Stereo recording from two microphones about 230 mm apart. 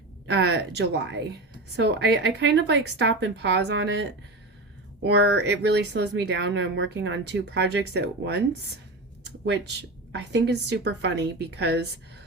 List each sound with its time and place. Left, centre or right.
0.3 s speech: right